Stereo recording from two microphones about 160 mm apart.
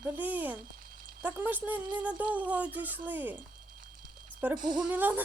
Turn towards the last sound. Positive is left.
turn(degrees=-10)  # may be behind; listen again after turning